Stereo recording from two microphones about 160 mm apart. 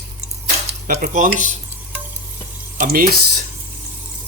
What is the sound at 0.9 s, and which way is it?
Cutlery, 60° right (ahead or behind).